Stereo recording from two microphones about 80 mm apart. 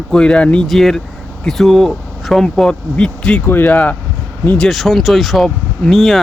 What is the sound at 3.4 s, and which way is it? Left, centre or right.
Speech, left.